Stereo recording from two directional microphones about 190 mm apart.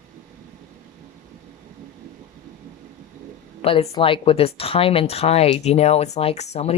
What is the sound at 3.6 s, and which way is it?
A woman's voice, 30° left (ahead or behind).